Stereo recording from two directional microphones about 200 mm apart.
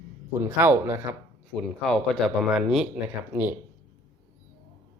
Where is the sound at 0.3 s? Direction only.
10° right (ahead or behind).